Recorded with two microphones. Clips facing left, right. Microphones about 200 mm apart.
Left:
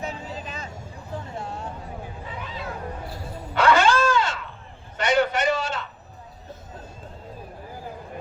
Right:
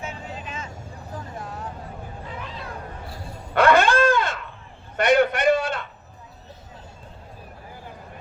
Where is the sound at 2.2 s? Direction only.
Centre (ahead or behind).